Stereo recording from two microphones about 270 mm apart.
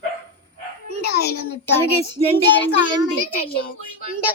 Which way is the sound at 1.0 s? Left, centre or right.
Left.